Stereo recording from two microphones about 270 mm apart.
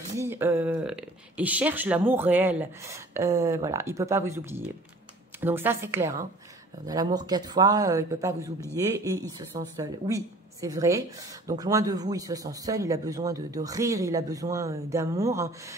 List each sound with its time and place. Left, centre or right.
0.1 s speech: centre